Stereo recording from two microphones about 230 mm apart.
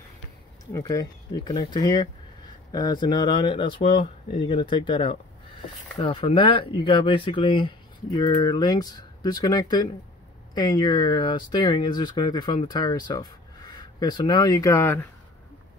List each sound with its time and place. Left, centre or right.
0.7 s speech: centre